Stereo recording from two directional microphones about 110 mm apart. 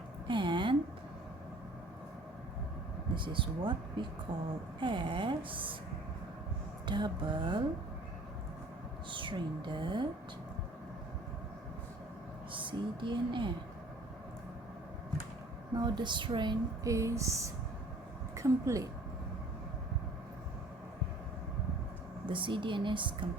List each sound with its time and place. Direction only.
0.3 s a sound: 45° right (ahead or behind)
3.2 s speech: 50° right (ahead or behind)
6.8 s speech: 45° right (ahead or behind)
9.0 s speech: 50° right (ahead or behind)
12.5 s a woman's voice: 50° right (ahead or behind)
15.7 s speech: 40° right (ahead or behind)
16.8 s a sound: 25° right (ahead or behind)
22.3 s speech: 50° right (ahead or behind)